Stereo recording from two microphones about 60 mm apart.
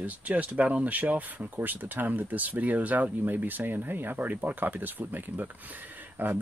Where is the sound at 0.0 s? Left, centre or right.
Right.